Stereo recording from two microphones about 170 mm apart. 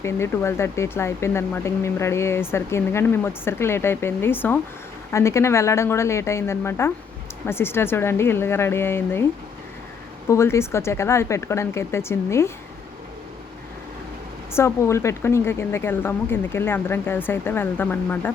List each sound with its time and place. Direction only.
0.0 s speech: 15° left (ahead or behind)
10.2 s speech: 15° left (ahead or behind)
14.5 s speech: 15° left (ahead or behind)